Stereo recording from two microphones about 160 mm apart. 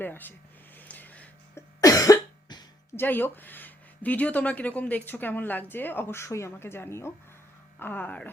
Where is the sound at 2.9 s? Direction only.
10° left (ahead or behind).